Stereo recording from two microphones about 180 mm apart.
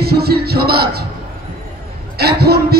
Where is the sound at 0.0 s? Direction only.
60° right (ahead or behind).